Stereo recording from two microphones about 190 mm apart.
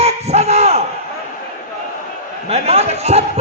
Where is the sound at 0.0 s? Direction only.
35° right (ahead or behind).